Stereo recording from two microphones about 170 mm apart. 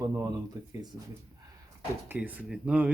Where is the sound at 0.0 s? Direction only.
20° right (ahead or behind).